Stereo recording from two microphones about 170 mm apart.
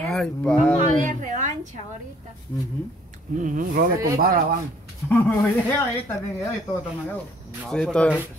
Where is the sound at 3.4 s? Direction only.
50° right (ahead or behind).